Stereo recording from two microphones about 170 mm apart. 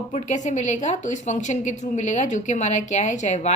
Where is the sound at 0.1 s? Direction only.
45° left (ahead or behind).